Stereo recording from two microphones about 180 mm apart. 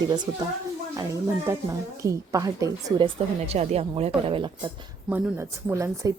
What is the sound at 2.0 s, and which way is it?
A woman's voice, 20° right (ahead or behind).